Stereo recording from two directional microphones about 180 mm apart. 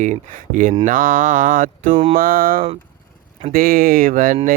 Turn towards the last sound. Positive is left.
turn(degrees=-50)  # may be behind; listen again after turning